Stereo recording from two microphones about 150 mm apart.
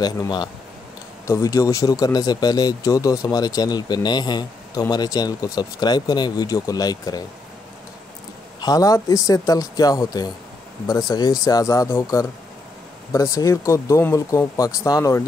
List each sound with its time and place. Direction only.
0.0 s speech: 30° left (ahead or behind)
8.5 s speech: 25° left (ahead or behind)